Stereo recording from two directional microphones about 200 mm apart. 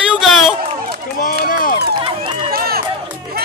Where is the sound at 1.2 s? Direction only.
45° left (ahead or behind).